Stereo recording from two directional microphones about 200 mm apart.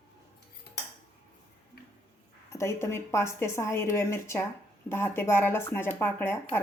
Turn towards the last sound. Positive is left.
turn(degrees=10)  # may be behind; listen again after turning